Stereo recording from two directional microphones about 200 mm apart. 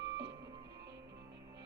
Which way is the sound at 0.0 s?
60° right (ahead or behind).